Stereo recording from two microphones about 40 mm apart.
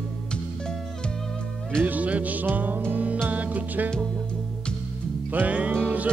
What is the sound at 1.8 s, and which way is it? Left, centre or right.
Music, right.